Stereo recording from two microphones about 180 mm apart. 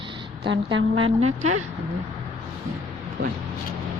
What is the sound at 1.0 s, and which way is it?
Speech, 35° right (ahead or behind).